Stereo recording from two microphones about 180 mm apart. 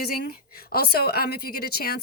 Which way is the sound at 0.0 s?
55° left (ahead or behind).